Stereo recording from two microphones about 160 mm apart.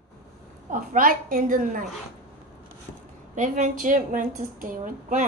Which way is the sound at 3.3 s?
55° right (ahead or behind).